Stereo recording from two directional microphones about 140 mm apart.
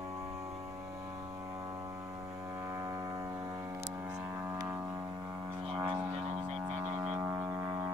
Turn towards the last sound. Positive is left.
turn(degrees=-15)  # may be behind; listen again after turning